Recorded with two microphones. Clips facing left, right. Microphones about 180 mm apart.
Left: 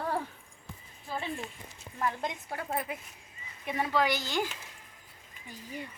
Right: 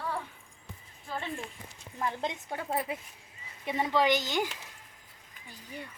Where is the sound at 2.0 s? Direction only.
20° right (ahead or behind).